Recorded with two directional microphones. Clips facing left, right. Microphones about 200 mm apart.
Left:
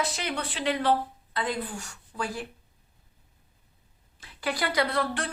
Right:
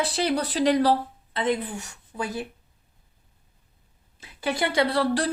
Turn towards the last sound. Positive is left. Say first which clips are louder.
# right 6 dB
turn(degrees=-35)  # may be behind; listen again after turning